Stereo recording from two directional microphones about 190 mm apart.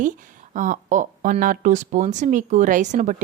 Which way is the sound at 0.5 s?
45° right (ahead or behind).